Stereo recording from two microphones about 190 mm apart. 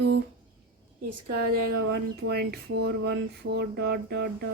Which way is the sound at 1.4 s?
50° right (ahead or behind).